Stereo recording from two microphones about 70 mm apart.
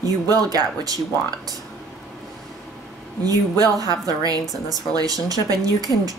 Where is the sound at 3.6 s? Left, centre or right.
Right.